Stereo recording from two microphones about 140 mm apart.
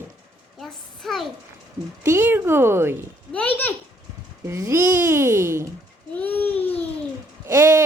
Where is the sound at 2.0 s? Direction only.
15° right (ahead or behind).